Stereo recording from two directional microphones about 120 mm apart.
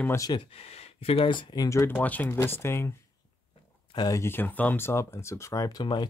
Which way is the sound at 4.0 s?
25° left (ahead or behind).